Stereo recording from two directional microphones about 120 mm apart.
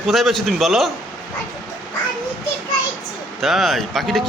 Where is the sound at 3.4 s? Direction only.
Centre (ahead or behind).